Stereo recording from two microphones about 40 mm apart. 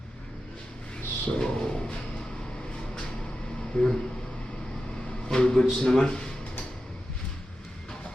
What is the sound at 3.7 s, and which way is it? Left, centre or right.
Speech, centre.